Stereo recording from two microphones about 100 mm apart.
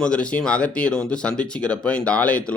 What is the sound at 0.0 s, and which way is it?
Speech, 10° left (ahead or behind).